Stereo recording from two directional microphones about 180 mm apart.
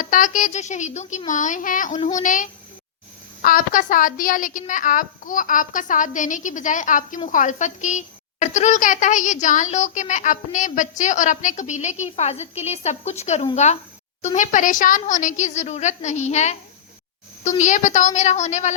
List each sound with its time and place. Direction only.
0.0 s a woman's voice: 45° left (ahead or behind)
17.6 s a woman's voice: 45° left (ahead or behind)